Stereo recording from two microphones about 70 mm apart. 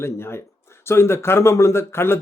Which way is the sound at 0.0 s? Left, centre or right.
Left.